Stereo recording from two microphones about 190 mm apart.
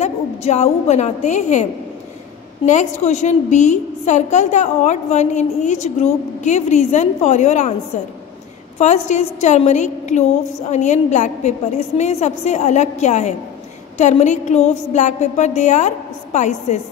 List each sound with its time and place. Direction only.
0.0 s a woman's voice: 35° left (ahead or behind)